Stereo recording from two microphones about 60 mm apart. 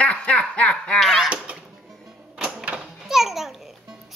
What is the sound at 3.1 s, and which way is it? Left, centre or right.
Babbling, centre.